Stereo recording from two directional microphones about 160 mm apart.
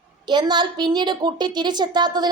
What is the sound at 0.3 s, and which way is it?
A woman's voice, 30° right (ahead or behind).